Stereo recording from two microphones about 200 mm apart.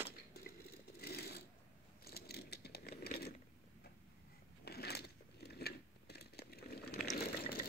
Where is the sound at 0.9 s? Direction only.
50° left (ahead or behind).